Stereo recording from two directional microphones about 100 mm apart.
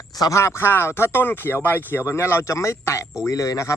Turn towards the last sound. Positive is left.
turn(degrees=30)  # may be behind; listen again after turning